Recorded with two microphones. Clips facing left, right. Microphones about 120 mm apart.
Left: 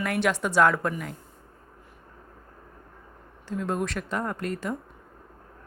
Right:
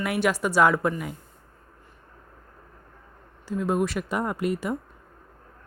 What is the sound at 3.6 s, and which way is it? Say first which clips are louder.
Speech: right 4 dB; 5° right (ahead or behind).